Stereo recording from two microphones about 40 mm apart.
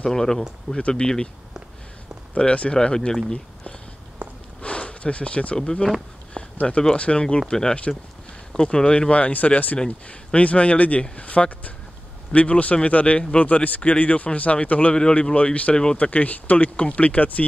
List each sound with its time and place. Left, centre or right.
0.0 s speech: centre
2.3 s speech: left
4.2 s a sound: right
4.6 s a sound: left
5.6 s speech: centre
7.0 s speech: left
9.8 s speech: left
15.7 s speech: left
16.0 s speech: left